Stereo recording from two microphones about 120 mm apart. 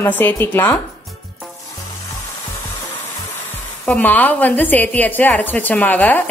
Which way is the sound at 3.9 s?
15° left (ahead or behind).